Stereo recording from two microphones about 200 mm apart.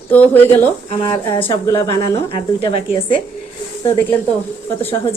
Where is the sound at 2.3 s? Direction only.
30° left (ahead or behind).